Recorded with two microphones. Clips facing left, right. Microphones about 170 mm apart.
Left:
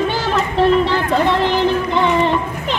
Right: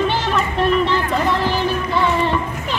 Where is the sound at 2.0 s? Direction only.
20° left (ahead or behind).